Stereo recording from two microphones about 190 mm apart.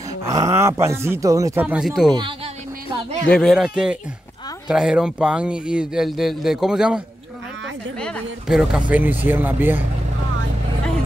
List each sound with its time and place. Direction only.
0.3 s speech: 15° right (ahead or behind)
2.1 s speech: 25° right (ahead or behind)
3.3 s speech: 5° left (ahead or behind)
8.0 s speech: centre (ahead or behind)